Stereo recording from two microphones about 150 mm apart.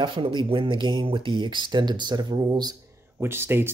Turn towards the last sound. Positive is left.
turn(degrees=-15)  # may be behind; listen again after turning